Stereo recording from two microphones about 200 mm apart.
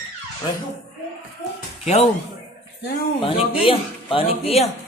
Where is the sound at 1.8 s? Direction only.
35° left (ahead or behind).